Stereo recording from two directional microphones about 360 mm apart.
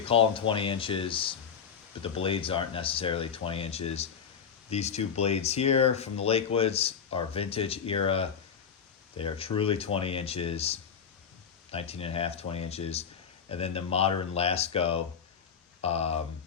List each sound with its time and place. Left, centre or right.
0.0 s speech: centre